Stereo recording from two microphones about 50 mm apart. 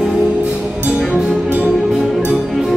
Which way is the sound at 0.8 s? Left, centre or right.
Right.